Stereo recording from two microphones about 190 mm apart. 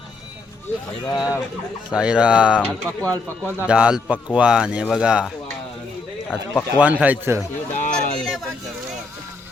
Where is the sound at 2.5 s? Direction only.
5° left (ahead or behind).